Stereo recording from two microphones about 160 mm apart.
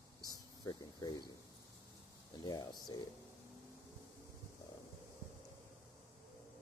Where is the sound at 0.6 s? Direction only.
25° left (ahead or behind).